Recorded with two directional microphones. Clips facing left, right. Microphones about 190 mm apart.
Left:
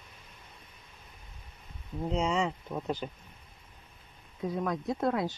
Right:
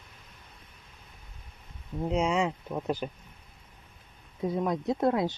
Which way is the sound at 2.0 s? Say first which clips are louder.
Right 3 dB; 10° right (ahead or behind).